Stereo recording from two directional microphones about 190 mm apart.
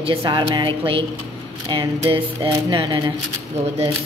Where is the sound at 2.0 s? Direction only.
25° right (ahead or behind).